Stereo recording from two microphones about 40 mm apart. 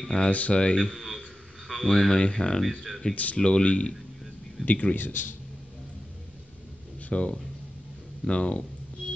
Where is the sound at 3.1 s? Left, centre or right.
Left.